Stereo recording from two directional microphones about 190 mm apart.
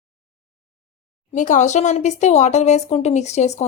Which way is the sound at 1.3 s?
40° left (ahead or behind).